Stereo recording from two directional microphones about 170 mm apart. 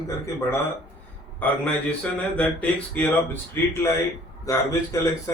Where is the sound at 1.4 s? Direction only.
10° left (ahead or behind).